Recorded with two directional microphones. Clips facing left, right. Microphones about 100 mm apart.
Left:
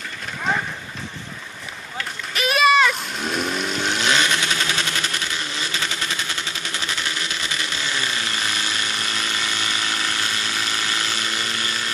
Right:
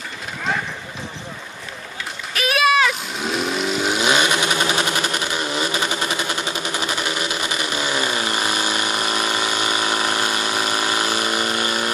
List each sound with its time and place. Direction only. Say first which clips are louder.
2.3 s chainsaw: left 1 dB; centre (ahead or behind); by 11.9 s 20° right (ahead or behind)